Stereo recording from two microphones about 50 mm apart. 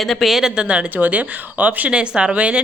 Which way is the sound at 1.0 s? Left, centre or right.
Right.